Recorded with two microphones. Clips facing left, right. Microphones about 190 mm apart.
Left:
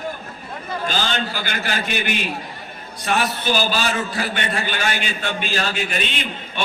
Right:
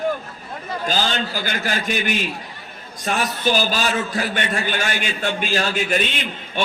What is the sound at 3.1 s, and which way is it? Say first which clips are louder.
A man's voice: even; 45° right (ahead or behind).